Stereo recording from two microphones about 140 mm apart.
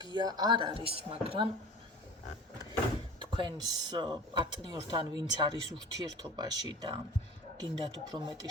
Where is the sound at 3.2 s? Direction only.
35° right (ahead or behind).